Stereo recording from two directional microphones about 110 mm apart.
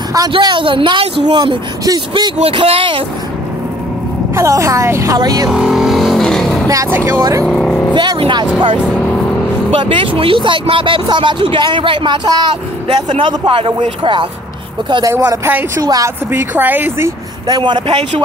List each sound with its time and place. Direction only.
0.3 s speech: 45° right (ahead or behind)
2.5 s speech: 55° right (ahead or behind)
4.4 s a woman's voice: 30° right (ahead or behind)
5.5 s vehicle: 5° right (ahead or behind)
6.7 s a woman's voice: 30° right (ahead or behind)
7.4 s speech: 5° left (ahead or behind)
7.9 s speech: 45° right (ahead or behind)
8.8 s vehicle: 10° left (ahead or behind)
9.7 s speech: 50° right (ahead or behind)
13.2 s speech: 55° right (ahead or behind)
15.0 s a woman's voice: 30° right (ahead or behind)
16.3 s a woman's voice: 20° right (ahead or behind)
17.5 s speech: 45° right (ahead or behind)